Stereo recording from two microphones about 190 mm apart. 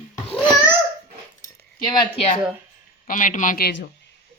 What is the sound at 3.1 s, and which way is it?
Speech, 45° left (ahead or behind).